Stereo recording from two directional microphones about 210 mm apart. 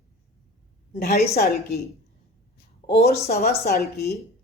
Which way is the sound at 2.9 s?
50° left (ahead or behind).